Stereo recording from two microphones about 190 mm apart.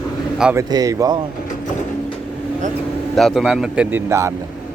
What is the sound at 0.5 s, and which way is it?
Speech, 20° right (ahead or behind).